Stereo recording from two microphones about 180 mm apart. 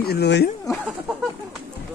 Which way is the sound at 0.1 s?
65° left (ahead or behind).